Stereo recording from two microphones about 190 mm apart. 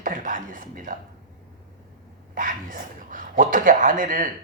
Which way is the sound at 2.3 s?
45° right (ahead or behind).